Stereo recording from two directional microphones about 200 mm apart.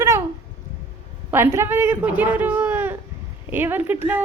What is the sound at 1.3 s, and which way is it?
A man's voice, 10° right (ahead or behind).